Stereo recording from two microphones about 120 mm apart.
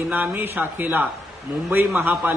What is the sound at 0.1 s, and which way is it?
A man's voice, 15° right (ahead or behind).